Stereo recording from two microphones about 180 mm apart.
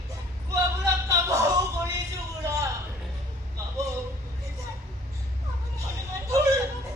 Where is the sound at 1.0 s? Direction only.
15° right (ahead or behind).